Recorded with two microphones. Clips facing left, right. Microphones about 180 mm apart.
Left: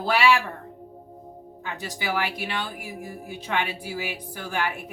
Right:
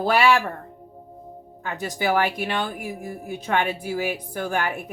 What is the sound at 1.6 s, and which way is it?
A woman's voice, 50° right (ahead or behind).